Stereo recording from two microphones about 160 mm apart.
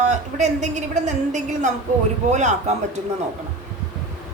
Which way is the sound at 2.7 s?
45° right (ahead or behind).